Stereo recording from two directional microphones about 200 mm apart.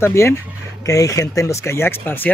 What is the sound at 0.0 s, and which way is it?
Speech, 10° left (ahead or behind).